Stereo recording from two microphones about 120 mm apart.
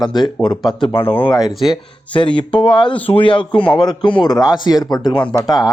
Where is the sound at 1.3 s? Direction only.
30° left (ahead or behind).